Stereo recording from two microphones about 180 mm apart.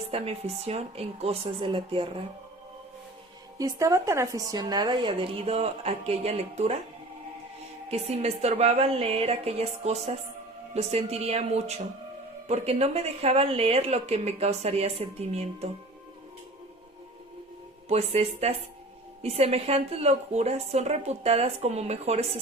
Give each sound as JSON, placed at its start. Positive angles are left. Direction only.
{"t": 0.1, "sound": "speech", "side_deg": -35}
{"t": 3.6, "sound": "a woman's voice", "side_deg": -15}
{"t": 7.9, "sound": "speech", "side_deg": -35}
{"t": 17.8, "sound": "speech", "side_deg": -35}